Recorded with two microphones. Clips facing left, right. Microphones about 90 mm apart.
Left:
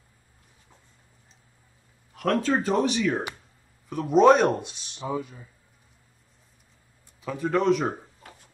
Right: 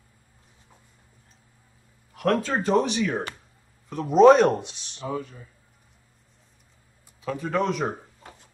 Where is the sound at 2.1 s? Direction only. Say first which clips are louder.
Even; centre (ahead or behind).